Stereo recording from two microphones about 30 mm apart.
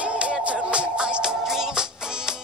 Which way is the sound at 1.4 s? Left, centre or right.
Centre.